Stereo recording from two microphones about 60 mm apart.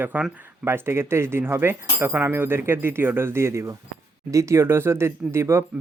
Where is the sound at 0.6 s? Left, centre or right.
Right.